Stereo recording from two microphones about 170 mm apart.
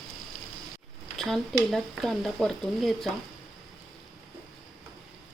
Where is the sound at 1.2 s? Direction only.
Centre (ahead or behind).